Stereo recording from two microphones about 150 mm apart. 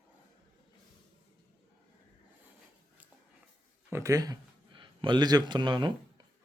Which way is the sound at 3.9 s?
20° right (ahead or behind).